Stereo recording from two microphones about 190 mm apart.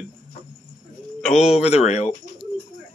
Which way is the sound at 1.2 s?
Centre (ahead or behind).